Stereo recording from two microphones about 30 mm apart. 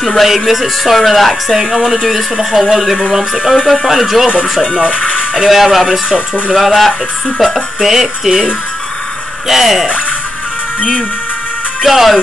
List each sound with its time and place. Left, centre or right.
0.2 s speech: centre
1.5 s speech: centre
4.6 s speech: centre
4.8 s speech: right
5.5 s speech: centre
7.5 s speech: centre
9.5 s speech: centre
11.8 s speech: centre